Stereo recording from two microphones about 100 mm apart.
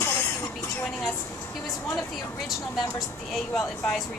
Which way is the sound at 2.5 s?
Centre (ahead or behind).